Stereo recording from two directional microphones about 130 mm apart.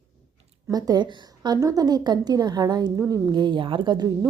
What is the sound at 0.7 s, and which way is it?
A woman's voice, 30° right (ahead or behind).